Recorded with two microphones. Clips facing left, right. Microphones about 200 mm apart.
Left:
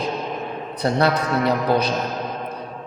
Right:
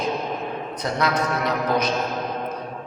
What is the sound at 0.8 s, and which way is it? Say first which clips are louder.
A man's voice: left 4 dB; 30° left (ahead or behind).